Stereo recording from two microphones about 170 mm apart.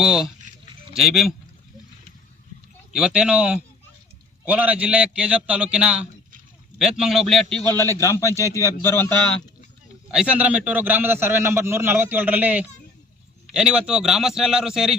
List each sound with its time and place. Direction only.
0.0 s a man's voice: 5° right (ahead or behind)
2.9 s a man's voice: 5° right (ahead or behind)
7.6 s a man's voice: 15° left (ahead or behind)
10.1 s a man's voice: 5° right (ahead or behind)